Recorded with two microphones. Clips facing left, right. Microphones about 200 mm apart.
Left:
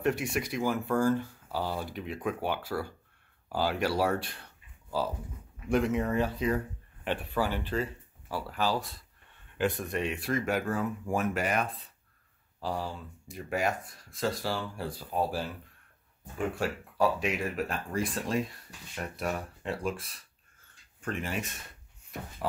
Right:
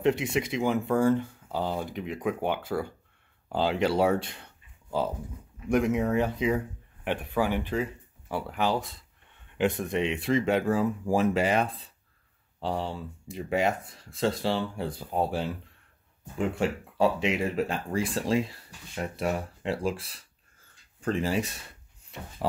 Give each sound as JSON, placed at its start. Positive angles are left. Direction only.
{"t": 0.0, "sound": "speech", "side_deg": -20}
{"t": 5.7, "sound": "speech", "side_deg": -15}